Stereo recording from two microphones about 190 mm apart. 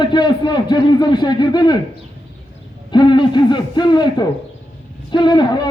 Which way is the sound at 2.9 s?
25° left (ahead or behind).